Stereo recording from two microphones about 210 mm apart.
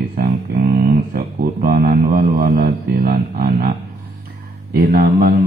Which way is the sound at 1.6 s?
45° right (ahead or behind).